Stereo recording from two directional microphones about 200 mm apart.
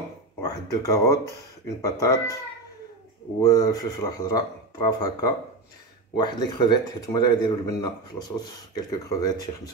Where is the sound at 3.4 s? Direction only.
15° left (ahead or behind).